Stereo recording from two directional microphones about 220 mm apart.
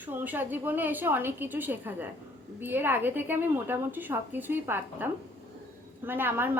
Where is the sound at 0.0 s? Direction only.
10° right (ahead or behind).